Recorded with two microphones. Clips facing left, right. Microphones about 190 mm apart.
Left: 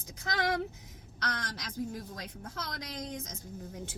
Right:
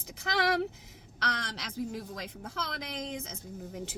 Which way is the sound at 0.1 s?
70° right (ahead or behind).